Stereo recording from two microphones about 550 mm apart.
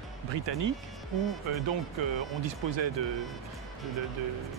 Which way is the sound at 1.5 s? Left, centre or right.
Right.